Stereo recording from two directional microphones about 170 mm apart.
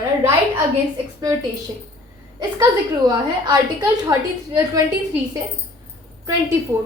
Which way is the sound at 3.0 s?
20° right (ahead or behind).